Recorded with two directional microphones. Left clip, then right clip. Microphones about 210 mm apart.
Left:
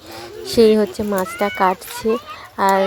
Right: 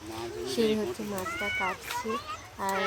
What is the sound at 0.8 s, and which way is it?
Speech, 35° left (ahead or behind).